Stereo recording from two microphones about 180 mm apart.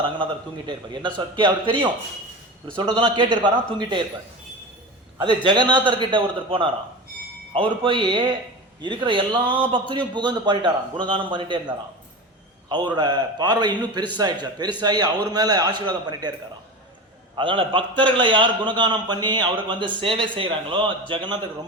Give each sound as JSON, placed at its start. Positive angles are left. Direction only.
{"t": 0.0, "sound": "a man's voice", "side_deg": -25}
{"t": 5.2, "sound": "a man's voice", "side_deg": -25}
{"t": 7.9, "sound": "a man's voice", "side_deg": -25}
{"t": 12.6, "sound": "a man's voice", "side_deg": -25}
{"t": 17.3, "sound": "a man's voice", "side_deg": -30}